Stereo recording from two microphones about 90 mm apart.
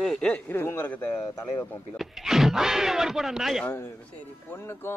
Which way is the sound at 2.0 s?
5° right (ahead or behind).